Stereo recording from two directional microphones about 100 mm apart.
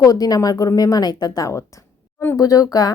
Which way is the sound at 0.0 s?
35° left (ahead or behind).